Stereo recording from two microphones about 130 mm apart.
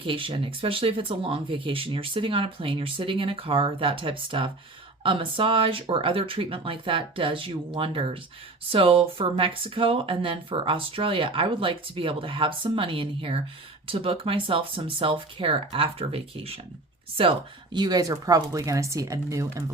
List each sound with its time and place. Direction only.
0.0 s speech: 40° right (ahead or behind); by 19.6 s 25° right (ahead or behind)